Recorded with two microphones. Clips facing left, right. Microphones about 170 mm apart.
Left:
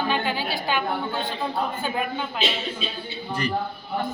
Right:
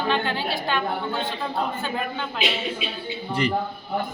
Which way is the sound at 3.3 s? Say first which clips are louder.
Right 3 dB; 25° right (ahead or behind).